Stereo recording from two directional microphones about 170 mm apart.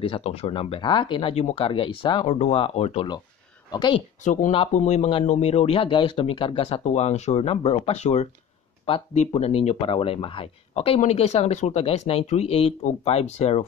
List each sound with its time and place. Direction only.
0.0 s speech: 35° left (ahead or behind)
2.2 s speech: 40° left (ahead or behind)
4.2 s speech: 50° left (ahead or behind)